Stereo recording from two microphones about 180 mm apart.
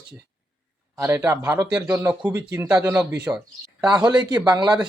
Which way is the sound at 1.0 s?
10° right (ahead or behind).